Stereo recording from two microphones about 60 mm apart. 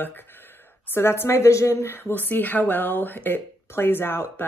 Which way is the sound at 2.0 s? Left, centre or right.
Left.